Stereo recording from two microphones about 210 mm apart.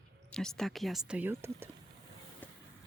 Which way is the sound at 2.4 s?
10° left (ahead or behind).